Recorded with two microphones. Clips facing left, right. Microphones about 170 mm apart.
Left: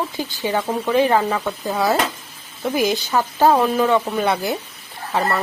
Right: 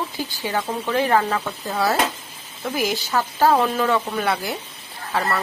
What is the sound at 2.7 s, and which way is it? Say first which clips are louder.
Speech: left 3 dB; 20° left (ahead or behind).